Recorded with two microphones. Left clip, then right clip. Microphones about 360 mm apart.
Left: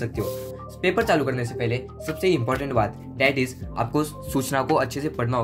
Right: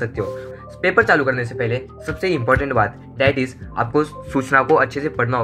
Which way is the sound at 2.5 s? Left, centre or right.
Centre.